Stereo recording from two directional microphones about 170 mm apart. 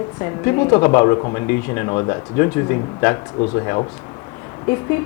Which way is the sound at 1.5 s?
15° left (ahead or behind).